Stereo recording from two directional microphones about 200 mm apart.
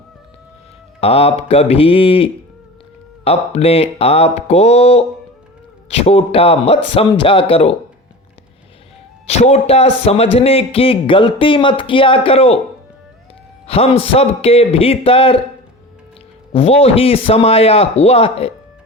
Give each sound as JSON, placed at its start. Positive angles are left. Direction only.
{"t": 1.0, "sound": "a man's voice", "side_deg": 30}
{"t": 9.2, "sound": "a man's voice", "side_deg": 30}
{"t": 13.7, "sound": "a man's voice", "side_deg": 30}
{"t": 16.5, "sound": "a man's voice", "side_deg": 30}